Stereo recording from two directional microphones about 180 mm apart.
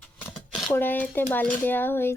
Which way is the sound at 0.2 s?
Centre (ahead or behind).